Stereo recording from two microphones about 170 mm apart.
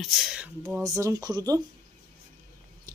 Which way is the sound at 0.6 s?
20° right (ahead or behind).